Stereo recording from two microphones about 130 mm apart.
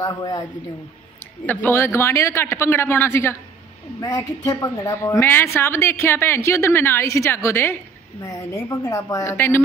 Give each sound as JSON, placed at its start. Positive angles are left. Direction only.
{"t": 0.0, "sound": "a man's voice", "side_deg": 30}
{"t": 1.4, "sound": "a woman's voice", "side_deg": 15}